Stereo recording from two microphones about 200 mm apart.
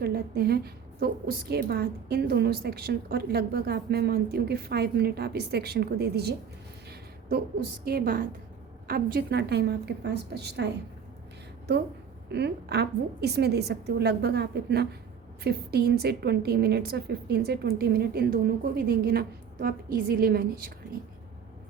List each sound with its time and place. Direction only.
0.0 s a woman's voice: 50° right (ahead or behind)
7.9 s a woman's voice: 50° right (ahead or behind)
12.3 s a woman's voice: 55° right (ahead or behind)